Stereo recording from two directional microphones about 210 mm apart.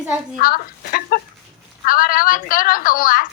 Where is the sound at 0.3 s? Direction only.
45° left (ahead or behind).